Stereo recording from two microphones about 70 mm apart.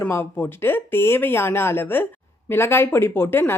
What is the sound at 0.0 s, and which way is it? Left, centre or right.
A woman's voice, left.